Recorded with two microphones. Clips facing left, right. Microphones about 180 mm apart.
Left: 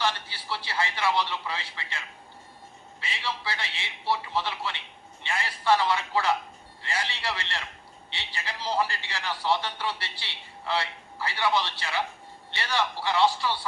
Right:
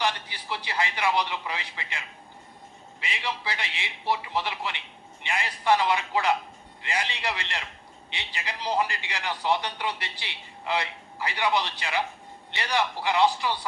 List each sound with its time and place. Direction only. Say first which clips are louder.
0.0 s a man's voice: right 1 dB; 15° right (ahead or behind)